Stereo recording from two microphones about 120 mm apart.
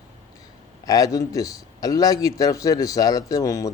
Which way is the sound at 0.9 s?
30° left (ahead or behind).